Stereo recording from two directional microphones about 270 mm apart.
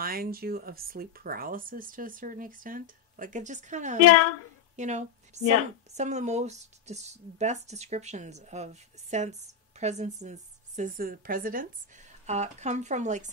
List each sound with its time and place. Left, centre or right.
0.0 s a woman's voice: right